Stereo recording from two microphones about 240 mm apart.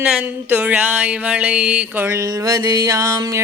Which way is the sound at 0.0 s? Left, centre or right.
Centre.